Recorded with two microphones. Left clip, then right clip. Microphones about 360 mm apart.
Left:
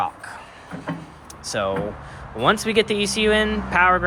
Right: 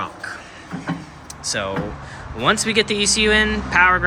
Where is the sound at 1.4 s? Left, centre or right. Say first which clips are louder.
Even; centre.